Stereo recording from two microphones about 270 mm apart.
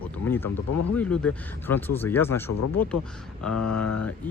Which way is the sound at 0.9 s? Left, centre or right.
Centre.